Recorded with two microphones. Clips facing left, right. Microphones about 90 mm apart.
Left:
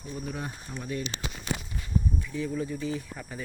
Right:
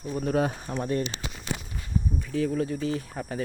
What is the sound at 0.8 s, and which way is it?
Speech, 45° right (ahead or behind).